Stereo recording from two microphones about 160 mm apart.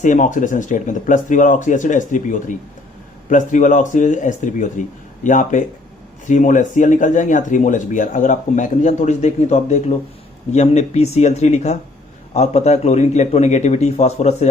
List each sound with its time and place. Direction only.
0.0 s speech: 50° left (ahead or behind)